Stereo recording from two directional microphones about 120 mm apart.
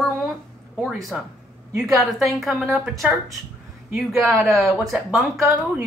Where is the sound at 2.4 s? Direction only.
Centre (ahead or behind).